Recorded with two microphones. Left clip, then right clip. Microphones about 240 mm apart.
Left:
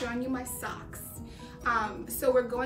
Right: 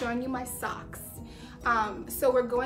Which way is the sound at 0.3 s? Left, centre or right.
Centre.